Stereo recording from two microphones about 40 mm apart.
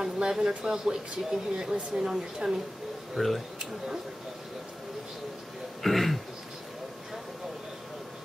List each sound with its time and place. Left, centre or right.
0.0 s speech: centre
3.2 s speech: centre
5.8 s throat clearing: centre